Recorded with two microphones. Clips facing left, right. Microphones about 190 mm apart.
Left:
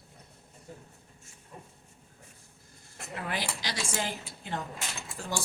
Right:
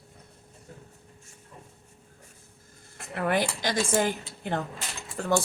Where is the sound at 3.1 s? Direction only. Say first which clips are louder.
Right 9 dB; 55° right (ahead or behind).